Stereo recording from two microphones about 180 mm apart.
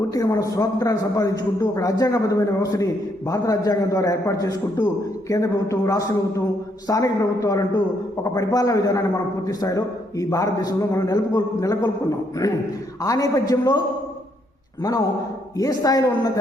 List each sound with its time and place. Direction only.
0.1 s a man's voice: 20° left (ahead or behind)
15.5 s a man's voice: 20° left (ahead or behind)